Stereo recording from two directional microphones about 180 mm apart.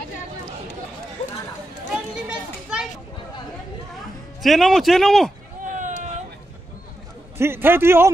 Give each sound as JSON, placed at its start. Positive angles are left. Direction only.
{"t": 2.2, "sound": "children playing", "side_deg": -5}
{"t": 4.4, "sound": "speech", "side_deg": 0}
{"t": 5.7, "sound": "vehicle", "side_deg": -45}
{"t": 7.3, "sound": "a man's voice", "side_deg": -15}